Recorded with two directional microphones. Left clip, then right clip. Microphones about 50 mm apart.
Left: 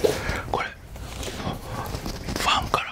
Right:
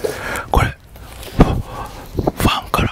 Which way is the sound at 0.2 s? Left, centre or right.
Right.